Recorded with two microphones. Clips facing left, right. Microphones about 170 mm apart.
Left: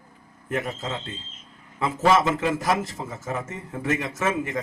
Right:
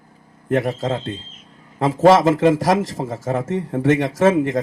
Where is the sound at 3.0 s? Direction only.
90° right.